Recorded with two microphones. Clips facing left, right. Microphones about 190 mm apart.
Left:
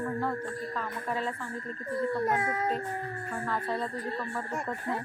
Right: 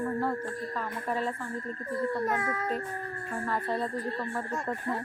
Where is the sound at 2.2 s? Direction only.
20° left (ahead or behind).